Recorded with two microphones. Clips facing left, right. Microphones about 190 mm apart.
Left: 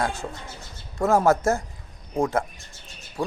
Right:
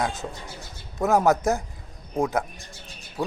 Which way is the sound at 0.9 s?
Centre (ahead or behind).